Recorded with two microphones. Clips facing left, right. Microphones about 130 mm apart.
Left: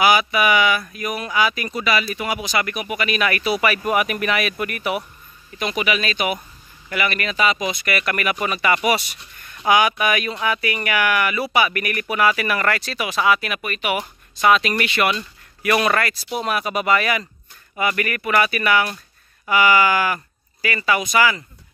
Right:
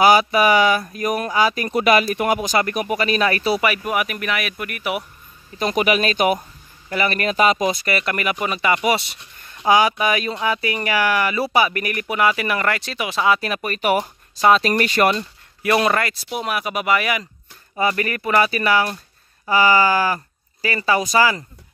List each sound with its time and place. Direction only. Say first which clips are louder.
0.0 s speech: right 3 dB; 40° right (ahead or behind)
3.8 s speech: left 3 dB; 5° right (ahead or behind)
5.6 s speech: right 4 dB; 45° right (ahead or behind)
7.8 s speech: right 1 dB; 25° right (ahead or behind)
17.7 s speech: right 2 dB; 30° right (ahead or behind)